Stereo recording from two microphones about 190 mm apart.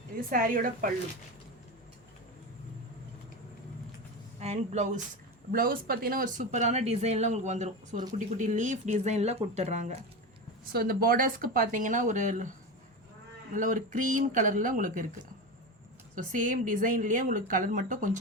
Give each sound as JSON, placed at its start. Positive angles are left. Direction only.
{"t": 0.3, "sound": "a woman's voice", "side_deg": -45}
{"t": 4.4, "sound": "speech", "side_deg": -35}
{"t": 10.7, "sound": "a woman's voice", "side_deg": -50}